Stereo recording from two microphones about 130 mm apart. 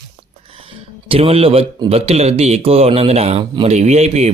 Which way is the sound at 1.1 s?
50° right (ahead or behind).